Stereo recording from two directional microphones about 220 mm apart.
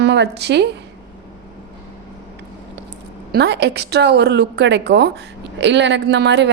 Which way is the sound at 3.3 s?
50° right (ahead or behind).